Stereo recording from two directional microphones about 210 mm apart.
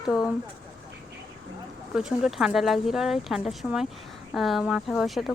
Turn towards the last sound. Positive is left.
turn(degrees=0)  # may be behind; listen again after turning